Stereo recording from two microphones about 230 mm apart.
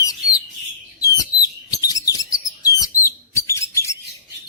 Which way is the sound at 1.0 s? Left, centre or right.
Centre.